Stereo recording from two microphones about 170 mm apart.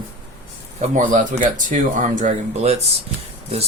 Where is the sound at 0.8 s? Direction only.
50° right (ahead or behind).